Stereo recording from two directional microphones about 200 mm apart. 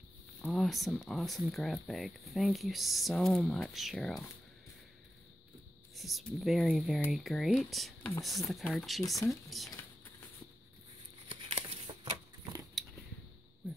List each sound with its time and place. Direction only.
0.4 s speech: centre (ahead or behind)
5.9 s speech: centre (ahead or behind)
11.2 s shuffling cards: 25° right (ahead or behind)
12.8 s a sound: centre (ahead or behind)